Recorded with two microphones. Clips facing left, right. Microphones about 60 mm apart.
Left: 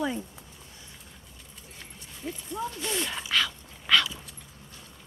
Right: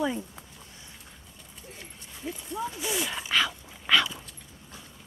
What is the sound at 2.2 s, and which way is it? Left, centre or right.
Dog, centre.